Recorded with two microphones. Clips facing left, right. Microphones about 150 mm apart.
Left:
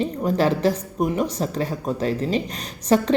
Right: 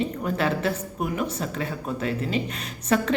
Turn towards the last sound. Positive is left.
turn(degrees=35)  # may be behind; listen again after turning